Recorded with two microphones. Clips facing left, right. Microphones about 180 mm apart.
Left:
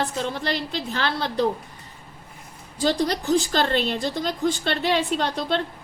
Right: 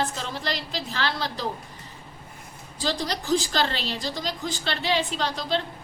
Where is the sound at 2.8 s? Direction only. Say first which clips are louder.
Left 6 dB; 60° left (ahead or behind).